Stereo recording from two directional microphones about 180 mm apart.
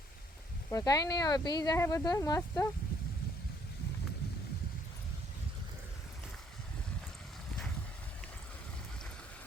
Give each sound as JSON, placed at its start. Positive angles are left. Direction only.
{"t": 0.7, "sound": "speech", "side_deg": 20}